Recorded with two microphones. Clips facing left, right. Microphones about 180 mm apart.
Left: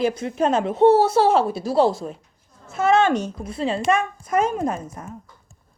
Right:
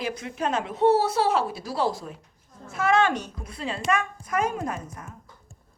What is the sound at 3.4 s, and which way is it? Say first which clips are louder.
A woman's voice: left 5 dB; 25° left (ahead or behind).